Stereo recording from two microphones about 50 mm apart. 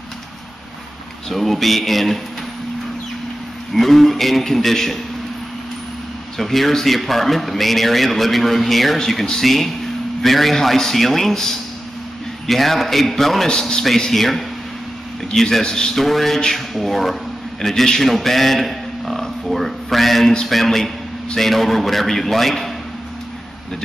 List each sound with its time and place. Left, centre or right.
1.3 s speech: centre
3.7 s speech: centre
6.3 s a man's voice: centre